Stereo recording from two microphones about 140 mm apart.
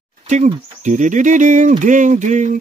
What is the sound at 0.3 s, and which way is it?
Insect, 60° right (ahead or behind).